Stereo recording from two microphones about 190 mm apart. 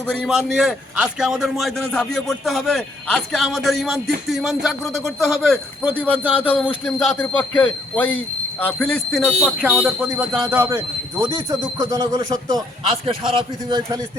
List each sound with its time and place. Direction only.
0.2 s a man's voice: centre (ahead or behind)
5.8 s speech: 10° right (ahead or behind)
6.3 s a man's voice: 10° left (ahead or behind); by 14.0 s 20° right (ahead or behind)